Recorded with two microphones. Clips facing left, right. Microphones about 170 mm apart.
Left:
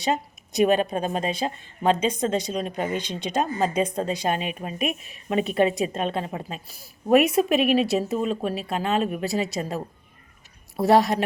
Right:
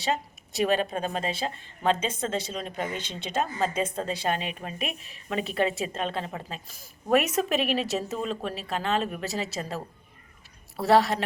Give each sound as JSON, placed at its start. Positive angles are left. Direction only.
{"t": 0.0, "sound": "speech", "side_deg": 15}